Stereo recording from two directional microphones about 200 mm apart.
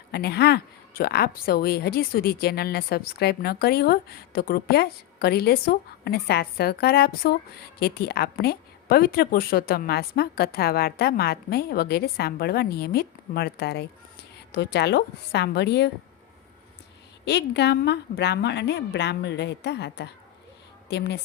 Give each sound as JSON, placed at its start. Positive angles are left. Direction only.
{"t": 0.1, "sound": "a woman's voice", "side_deg": 55}
{"t": 17.2, "sound": "a woman's voice", "side_deg": 55}